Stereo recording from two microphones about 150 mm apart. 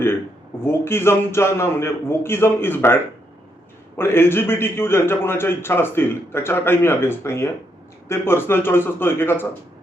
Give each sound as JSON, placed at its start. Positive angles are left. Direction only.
{"t": 0.6, "sound": "a man's voice", "side_deg": 15}